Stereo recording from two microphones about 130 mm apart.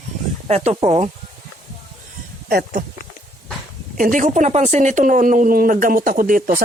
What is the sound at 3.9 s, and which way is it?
Speech, 85° right.